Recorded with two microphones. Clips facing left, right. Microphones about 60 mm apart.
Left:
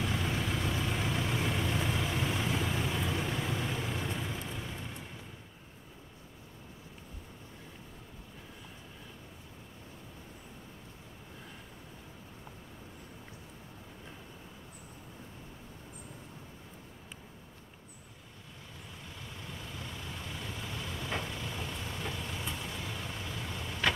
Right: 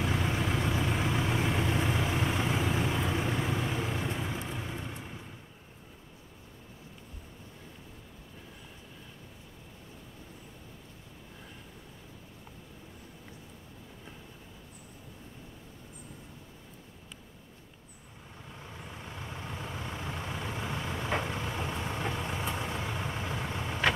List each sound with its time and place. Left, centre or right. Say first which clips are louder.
0.0 s vehicle: right 3 dB; centre
18.7 s vehicle: right 5 dB; right